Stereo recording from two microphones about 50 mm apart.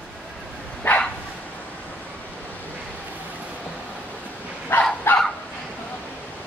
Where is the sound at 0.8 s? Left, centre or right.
Left.